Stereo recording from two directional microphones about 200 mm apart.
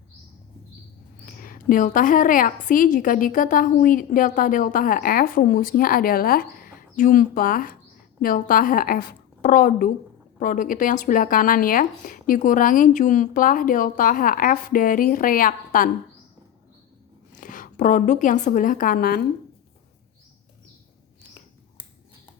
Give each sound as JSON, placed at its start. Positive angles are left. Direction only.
{"t": 1.2, "sound": "a woman's voice", "side_deg": 45}
{"t": 17.3, "sound": "a woman's voice", "side_deg": 40}